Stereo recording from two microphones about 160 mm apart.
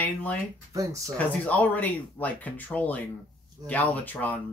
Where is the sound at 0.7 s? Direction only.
20° right (ahead or behind).